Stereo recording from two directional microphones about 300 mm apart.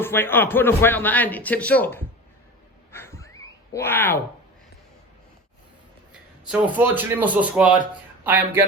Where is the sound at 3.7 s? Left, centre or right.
Centre.